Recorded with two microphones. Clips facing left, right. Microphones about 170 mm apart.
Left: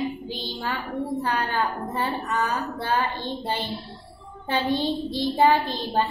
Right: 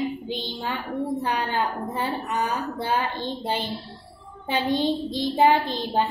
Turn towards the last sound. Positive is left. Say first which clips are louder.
# right 1 dB
turn(degrees=-15)  # may be behind; listen again after turning